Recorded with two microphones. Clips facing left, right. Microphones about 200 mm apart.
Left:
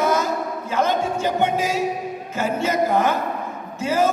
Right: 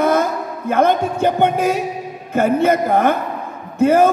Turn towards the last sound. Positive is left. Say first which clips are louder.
# right 8 dB
turn(degrees=-55)  # may be behind; listen again after turning